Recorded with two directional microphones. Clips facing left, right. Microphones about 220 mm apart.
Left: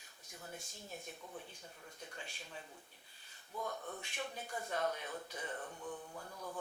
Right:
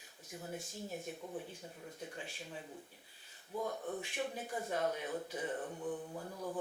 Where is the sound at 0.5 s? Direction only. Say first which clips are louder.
Right 7 dB; 5° right (ahead or behind).